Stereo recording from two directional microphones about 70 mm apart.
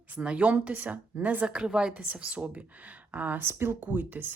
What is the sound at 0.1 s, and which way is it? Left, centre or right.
Speech, centre.